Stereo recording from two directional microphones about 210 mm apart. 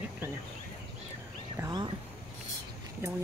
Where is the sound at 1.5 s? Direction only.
20° right (ahead or behind).